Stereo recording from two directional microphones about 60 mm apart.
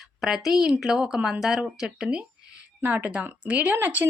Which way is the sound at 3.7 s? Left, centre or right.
Right.